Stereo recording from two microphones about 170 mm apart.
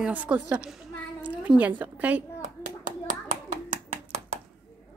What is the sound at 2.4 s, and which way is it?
Clapping, 50° right (ahead or behind).